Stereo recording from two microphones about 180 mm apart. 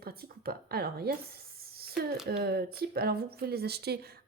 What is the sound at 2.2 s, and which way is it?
Speech, 60° right (ahead or behind).